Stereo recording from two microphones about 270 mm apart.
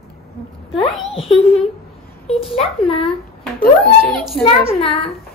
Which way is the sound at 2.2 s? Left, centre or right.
Left.